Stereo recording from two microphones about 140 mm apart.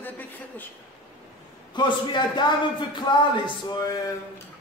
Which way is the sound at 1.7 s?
30° left (ahead or behind).